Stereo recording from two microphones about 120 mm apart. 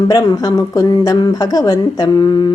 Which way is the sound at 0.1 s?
30° left (ahead or behind).